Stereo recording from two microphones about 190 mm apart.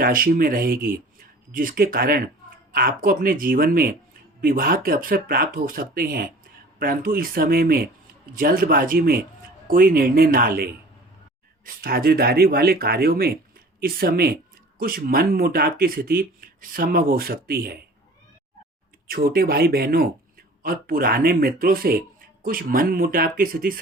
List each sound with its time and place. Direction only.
0.0 s speech: 50° right (ahead or behind)
19.0 s speech: 50° right (ahead or behind)